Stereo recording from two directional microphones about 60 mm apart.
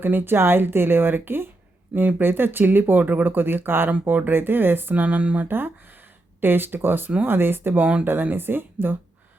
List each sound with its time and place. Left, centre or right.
0.0 s speech: right
5.5 s speech: right